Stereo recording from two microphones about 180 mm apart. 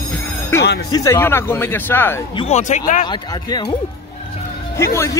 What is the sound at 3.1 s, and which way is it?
Speech, 25° left (ahead or behind).